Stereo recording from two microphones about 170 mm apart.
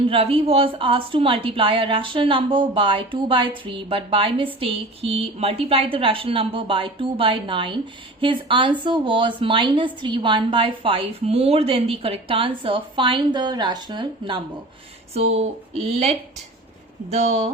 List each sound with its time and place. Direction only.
0.0 s a woman's voice: 35° right (ahead or behind)
15.1 s a woman's voice: 40° right (ahead or behind)